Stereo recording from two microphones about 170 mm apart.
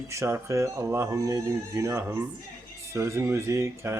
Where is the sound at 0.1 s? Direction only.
15° right (ahead or behind).